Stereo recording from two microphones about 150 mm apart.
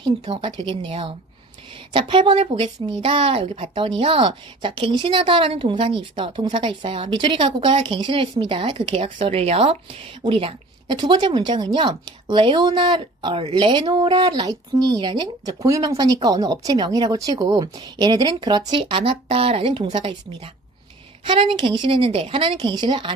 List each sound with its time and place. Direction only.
0.0 s a woman's voice: 35° right (ahead or behind)